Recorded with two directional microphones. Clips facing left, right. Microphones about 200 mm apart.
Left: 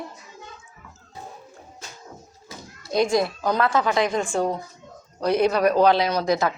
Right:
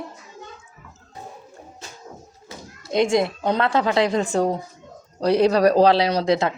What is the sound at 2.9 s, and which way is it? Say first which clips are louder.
A woman's voice: right 2 dB; 25° right (ahead or behind).